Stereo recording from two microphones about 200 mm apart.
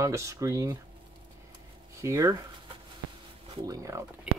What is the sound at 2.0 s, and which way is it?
Speech, 15° right (ahead or behind).